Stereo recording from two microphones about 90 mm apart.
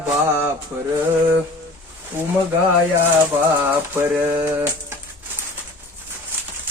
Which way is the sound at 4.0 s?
25° right (ahead or behind).